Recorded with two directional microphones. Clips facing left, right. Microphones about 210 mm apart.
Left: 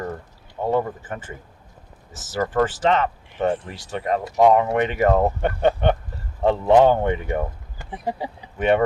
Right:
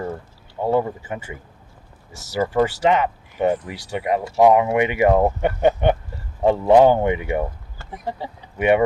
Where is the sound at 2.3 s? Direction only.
10° right (ahead or behind).